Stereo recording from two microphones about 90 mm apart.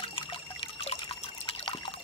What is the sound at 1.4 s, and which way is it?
Water, 85° left.